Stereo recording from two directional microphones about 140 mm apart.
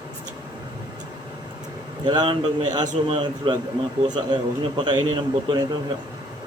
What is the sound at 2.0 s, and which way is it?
A man's voice, 35° right (ahead or behind).